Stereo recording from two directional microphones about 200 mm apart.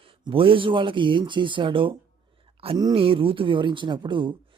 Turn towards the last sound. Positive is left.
turn(degrees=-25)  # may be behind; listen again after turning